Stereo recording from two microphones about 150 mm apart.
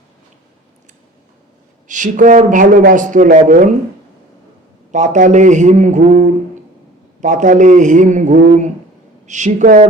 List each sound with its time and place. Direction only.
1.9 s speech: 55° right (ahead or behind)
4.9 s speech: 55° right (ahead or behind)